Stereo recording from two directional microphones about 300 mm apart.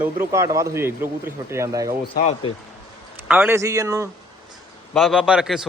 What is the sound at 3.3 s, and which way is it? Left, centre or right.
Speech, centre.